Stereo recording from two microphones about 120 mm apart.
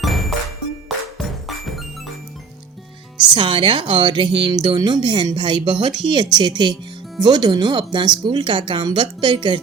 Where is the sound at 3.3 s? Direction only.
45° right (ahead or behind).